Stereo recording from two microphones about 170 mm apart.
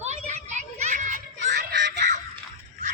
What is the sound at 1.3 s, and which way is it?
Music, 90° right.